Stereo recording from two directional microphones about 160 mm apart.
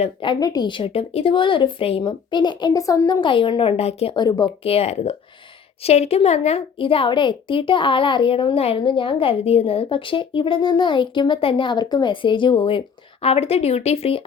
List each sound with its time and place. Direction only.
0.0 s a woman's voice: 30° left (ahead or behind)
4.6 s a woman's voice: 40° left (ahead or behind)